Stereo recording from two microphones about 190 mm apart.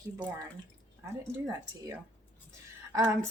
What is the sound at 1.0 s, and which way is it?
Speech, 15° right (ahead or behind).